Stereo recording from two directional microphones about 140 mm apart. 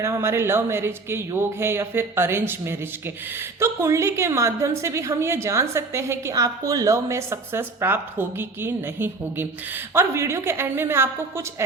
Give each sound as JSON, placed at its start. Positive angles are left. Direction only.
{"t": 0.0, "sound": "a woman's voice", "side_deg": -20}